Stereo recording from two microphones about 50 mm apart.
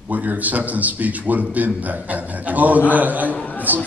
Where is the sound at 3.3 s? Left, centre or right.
Left.